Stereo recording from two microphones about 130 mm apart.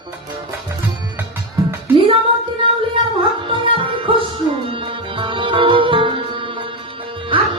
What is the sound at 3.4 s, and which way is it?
Music, 40° right (ahead or behind).